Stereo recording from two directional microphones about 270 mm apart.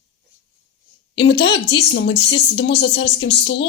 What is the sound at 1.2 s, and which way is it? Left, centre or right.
Speech, left.